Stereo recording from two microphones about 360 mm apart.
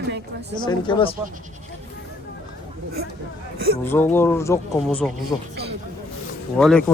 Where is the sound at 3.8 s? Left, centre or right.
Centre.